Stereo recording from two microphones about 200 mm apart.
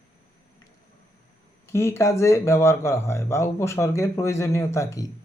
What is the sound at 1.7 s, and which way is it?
Speech, 15° left (ahead or behind).